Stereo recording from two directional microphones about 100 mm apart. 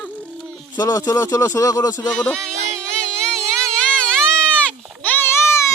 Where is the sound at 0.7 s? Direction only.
40° left (ahead or behind).